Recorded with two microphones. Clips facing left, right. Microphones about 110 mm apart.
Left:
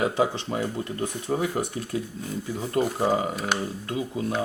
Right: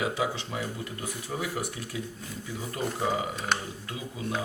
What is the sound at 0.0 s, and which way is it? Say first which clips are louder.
Speech: left 5 dB; 40° left (ahead or behind).